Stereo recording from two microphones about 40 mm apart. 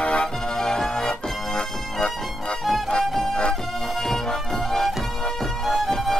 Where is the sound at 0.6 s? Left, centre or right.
Centre.